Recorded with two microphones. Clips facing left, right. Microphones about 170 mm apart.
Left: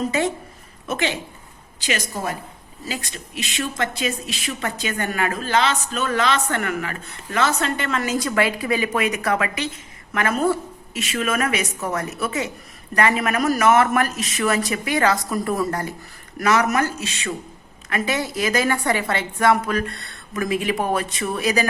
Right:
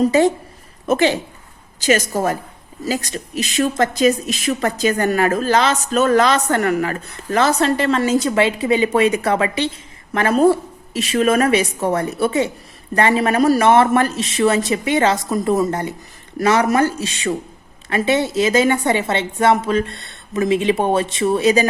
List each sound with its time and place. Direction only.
0.0 s a woman's voice: 35° right (ahead or behind)